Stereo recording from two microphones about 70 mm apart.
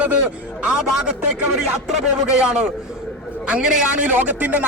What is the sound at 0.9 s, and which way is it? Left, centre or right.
Speech, centre.